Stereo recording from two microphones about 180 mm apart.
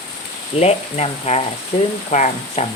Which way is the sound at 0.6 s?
35° left (ahead or behind).